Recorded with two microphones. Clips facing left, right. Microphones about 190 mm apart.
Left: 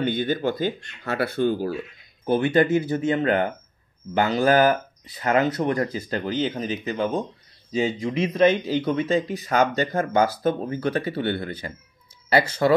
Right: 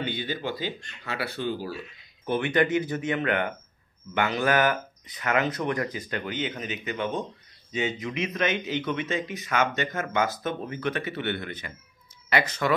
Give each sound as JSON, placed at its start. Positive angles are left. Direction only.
{"t": 0.0, "sound": "speech", "side_deg": 50}
{"t": 2.2, "sound": "speech", "side_deg": 30}